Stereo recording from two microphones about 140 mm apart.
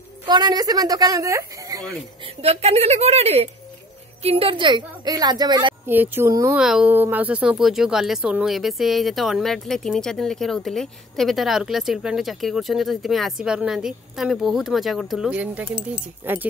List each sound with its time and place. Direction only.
0.3 s speech: 30° right (ahead or behind)
2.2 s a woman's voice: 45° right (ahead or behind)
5.9 s speech: 15° right (ahead or behind)
6.5 s speech: 5° right (ahead or behind)